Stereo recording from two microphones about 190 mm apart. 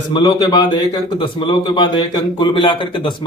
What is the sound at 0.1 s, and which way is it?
A man's voice, 25° left (ahead or behind).